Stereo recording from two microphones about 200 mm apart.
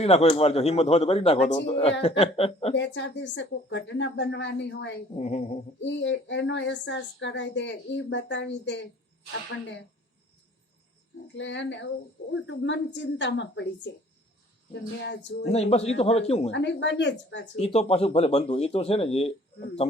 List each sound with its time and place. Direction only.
0.0 s speech: 30° left (ahead or behind)
2.7 s speech: 65° left (ahead or behind)
5.1 s speech: 35° left (ahead or behind)
5.8 s speech: 65° left (ahead or behind)
11.3 s speech: 65° left (ahead or behind)
15.4 s speech: 30° left (ahead or behind)
16.5 s speech: 60° left (ahead or behind)
17.6 s speech: 30° left (ahead or behind)